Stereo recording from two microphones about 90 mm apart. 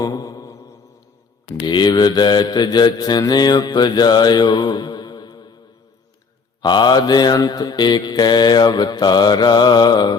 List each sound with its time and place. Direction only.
0.0 s mantra: 45° left (ahead or behind)
1.6 s mantra: 55° left (ahead or behind)
6.6 s mantra: 55° left (ahead or behind)